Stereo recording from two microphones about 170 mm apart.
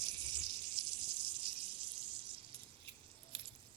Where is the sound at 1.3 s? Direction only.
30° right (ahead or behind).